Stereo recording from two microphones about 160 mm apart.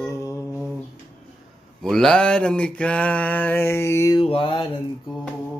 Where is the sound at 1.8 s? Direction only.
5° left (ahead or behind); by 4.2 s 20° left (ahead or behind).